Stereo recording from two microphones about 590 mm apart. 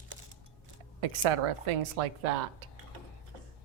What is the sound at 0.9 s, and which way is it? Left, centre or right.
A woman's voice, right.